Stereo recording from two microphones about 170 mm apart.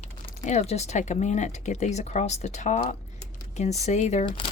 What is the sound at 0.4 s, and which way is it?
Speech, 40° left (ahead or behind).